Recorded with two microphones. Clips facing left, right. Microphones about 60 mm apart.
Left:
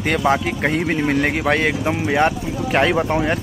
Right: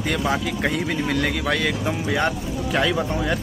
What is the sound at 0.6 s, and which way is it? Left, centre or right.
Speech, left.